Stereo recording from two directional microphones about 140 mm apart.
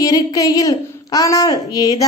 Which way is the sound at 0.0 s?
25° left (ahead or behind).